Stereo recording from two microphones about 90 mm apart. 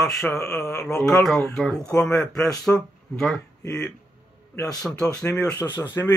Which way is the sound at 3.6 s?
30° left (ahead or behind).